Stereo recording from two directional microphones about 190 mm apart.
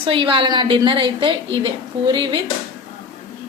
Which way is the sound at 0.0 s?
30° right (ahead or behind).